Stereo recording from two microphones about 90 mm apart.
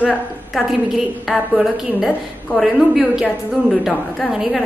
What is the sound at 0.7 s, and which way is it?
A woman's voice, 5° right (ahead or behind).